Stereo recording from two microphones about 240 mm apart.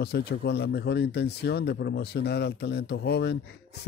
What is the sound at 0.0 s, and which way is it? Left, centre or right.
Speech, left.